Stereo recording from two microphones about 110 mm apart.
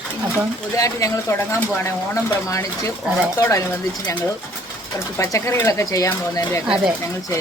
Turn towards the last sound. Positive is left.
turn(degrees=30)  # may be behind; listen again after turning